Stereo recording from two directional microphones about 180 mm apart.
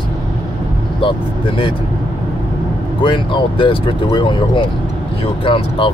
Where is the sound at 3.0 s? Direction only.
25° left (ahead or behind).